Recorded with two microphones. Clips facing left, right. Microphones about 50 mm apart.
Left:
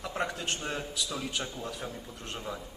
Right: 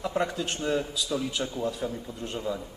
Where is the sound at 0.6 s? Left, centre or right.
Left.